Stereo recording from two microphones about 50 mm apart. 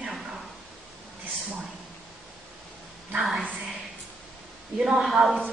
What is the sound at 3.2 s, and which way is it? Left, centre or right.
Speech, centre.